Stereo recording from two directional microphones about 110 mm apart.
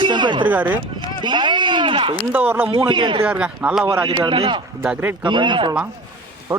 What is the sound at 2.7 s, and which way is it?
Speech, 50° right (ahead or behind).